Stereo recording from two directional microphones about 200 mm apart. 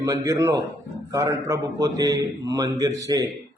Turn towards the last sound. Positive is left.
turn(degrees=-15)  # may be behind; listen again after turning